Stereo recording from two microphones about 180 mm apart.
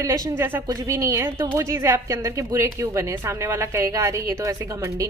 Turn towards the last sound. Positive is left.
turn(degrees=-15)  # may be behind; listen again after turning